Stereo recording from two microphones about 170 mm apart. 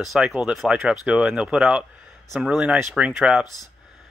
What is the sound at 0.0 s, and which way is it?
Speech, centre (ahead or behind).